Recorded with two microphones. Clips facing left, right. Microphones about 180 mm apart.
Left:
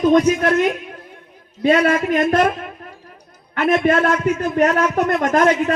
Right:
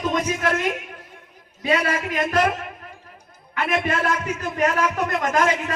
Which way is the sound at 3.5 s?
55° left (ahead or behind).